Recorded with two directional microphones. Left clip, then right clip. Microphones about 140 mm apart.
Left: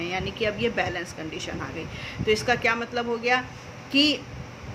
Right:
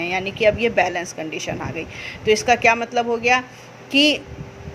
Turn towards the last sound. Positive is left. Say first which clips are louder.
# right 5 dB
turn(degrees=-50)  # may be behind; listen again after turning